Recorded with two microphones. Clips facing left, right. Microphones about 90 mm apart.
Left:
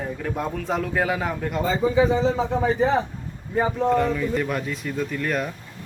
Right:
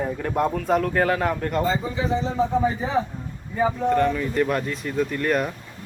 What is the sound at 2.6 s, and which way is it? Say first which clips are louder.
Speech: left 4 dB; 70° left (ahead or behind).